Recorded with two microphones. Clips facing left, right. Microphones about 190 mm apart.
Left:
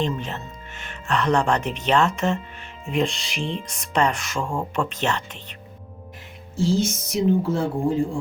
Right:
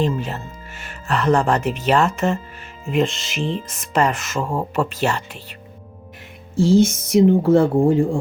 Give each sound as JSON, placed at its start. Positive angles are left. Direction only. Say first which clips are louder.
{"t": 0.2, "sound": "speech", "louder": "right 4 dB", "side_deg": -5}
{"t": 6.7, "sound": "speech", "louder": "right 8 dB", "side_deg": -55}